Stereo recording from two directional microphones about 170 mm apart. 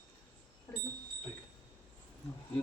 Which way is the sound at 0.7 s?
15° left (ahead or behind).